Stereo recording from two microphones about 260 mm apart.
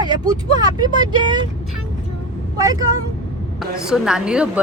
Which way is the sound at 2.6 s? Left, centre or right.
Centre.